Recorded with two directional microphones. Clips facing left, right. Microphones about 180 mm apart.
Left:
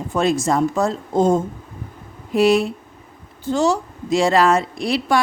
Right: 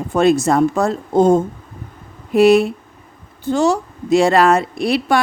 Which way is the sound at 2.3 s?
60° right (ahead or behind).